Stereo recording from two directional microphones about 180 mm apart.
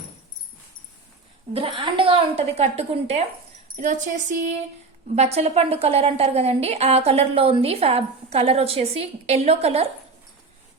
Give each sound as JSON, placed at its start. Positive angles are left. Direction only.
{"t": 1.5, "sound": "a woman's voice", "side_deg": -30}